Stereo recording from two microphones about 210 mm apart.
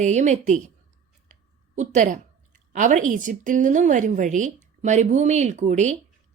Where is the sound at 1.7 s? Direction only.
35° right (ahead or behind).